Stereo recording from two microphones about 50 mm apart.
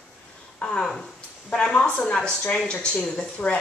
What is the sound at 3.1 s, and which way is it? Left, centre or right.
Speech, left.